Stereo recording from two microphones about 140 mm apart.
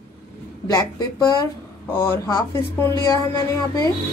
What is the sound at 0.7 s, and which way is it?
Speech, 25° left (ahead or behind).